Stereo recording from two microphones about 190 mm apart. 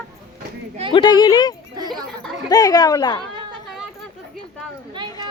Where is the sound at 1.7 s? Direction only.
20° right (ahead or behind).